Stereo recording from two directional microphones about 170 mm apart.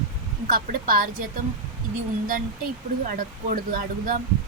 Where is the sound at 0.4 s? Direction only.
55° right (ahead or behind).